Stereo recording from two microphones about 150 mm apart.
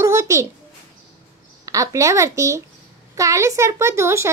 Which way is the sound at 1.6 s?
20° right (ahead or behind).